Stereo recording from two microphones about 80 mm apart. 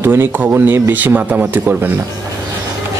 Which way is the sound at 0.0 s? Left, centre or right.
Right.